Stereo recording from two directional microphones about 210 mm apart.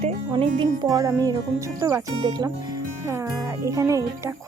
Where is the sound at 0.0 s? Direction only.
25° right (ahead or behind).